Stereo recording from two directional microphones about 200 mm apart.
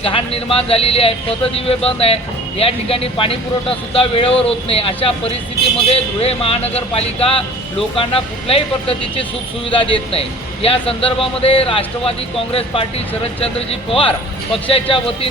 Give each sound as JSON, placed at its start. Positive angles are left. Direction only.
{"t": 0.0, "sound": "speech", "side_deg": 30}
{"t": 13.4, "sound": "speech", "side_deg": 30}